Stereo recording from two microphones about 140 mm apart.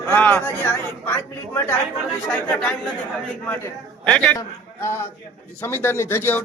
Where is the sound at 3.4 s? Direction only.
10° left (ahead or behind).